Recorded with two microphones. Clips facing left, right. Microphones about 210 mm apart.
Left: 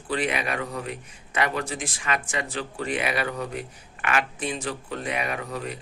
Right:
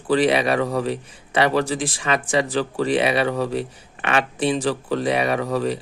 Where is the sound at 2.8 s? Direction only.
30° right (ahead or behind).